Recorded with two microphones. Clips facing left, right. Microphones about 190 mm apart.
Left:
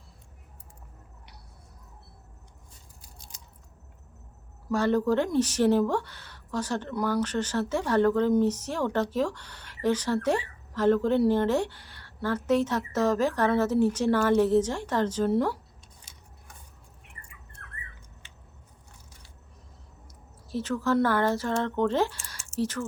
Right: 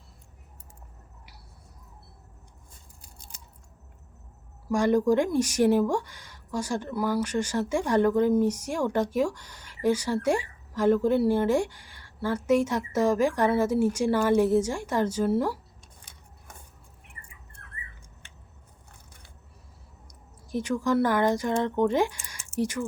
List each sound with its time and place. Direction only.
4.7 s speech: 15° right (ahead or behind)
16.1 s scissors: 55° right (ahead or behind)
20.1 s speech: 15° right (ahead or behind)